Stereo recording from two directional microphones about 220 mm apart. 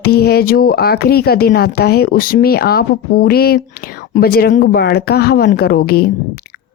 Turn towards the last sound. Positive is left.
turn(degrees=45)  # may be behind; listen again after turning